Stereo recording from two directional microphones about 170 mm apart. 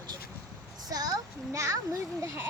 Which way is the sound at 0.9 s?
20° right (ahead or behind).